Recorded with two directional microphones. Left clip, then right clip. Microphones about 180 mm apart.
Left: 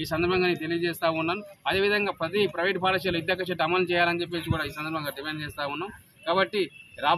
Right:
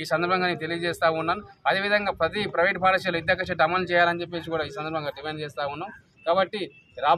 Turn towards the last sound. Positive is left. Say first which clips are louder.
# right 3 dB
turn(degrees=-15)  # may be behind; listen again after turning